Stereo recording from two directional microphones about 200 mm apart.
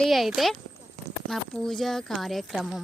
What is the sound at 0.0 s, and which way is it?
Speech, centre (ahead or behind).